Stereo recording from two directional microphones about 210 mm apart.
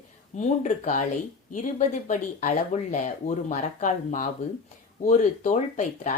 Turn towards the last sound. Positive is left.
turn(degrees=35)  # may be behind; listen again after turning